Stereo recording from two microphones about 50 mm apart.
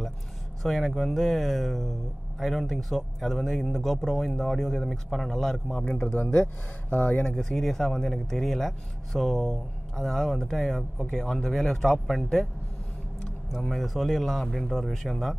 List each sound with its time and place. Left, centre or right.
0.6 s speech: centre
6.9 s speech: left
7.3 s speech: centre
13.5 s speech: centre